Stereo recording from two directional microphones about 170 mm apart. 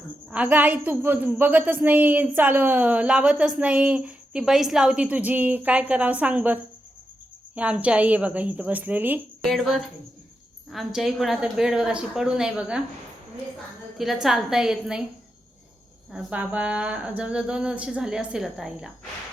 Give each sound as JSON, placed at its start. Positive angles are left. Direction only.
{"t": 0.3, "sound": "a woman's voice", "side_deg": -5}
{"t": 14.0, "sound": "a woman's voice", "side_deg": 0}
{"t": 16.1, "sound": "a woman's voice", "side_deg": -10}